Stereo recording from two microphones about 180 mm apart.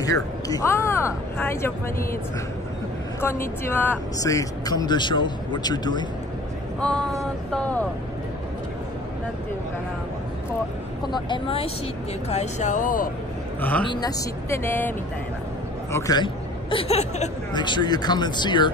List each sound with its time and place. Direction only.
0.0 s speech: 20° left (ahead or behind)
3.2 s speech: 15° left (ahead or behind)
6.8 s speech: 5° left (ahead or behind)
11.1 s speech: 25° left (ahead or behind); by 13.1 s 50° left (ahead or behind)
13.6 s a man's voice: 10° left (ahead or behind)
13.8 s speech: 20° left (ahead or behind)
16.7 s speech: 35° left (ahead or behind)
17.6 s speech: 25° left (ahead or behind)